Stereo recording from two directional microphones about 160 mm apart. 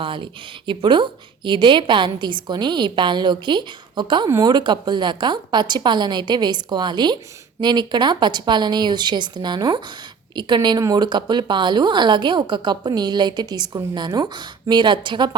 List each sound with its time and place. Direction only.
0.0 s a woman's voice: 30° right (ahead or behind)